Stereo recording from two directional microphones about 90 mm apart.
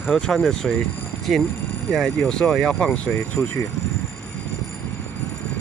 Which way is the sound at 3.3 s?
30° left (ahead or behind).